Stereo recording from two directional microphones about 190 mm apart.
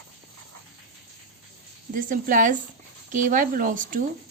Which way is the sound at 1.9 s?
45° right (ahead or behind).